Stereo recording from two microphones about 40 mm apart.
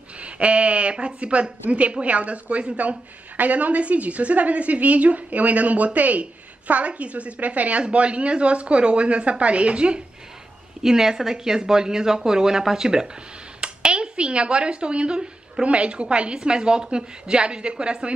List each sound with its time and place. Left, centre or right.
0.2 s a woman's voice: right
10.8 s a woman's voice: centre